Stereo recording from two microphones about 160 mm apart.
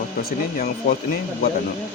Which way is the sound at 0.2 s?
75° left (ahead or behind).